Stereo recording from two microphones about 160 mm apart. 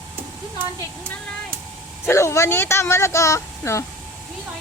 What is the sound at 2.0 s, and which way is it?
Speech, 15° left (ahead or behind).